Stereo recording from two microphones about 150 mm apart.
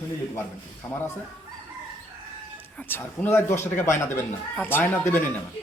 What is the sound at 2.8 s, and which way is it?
Speech, 15° left (ahead or behind).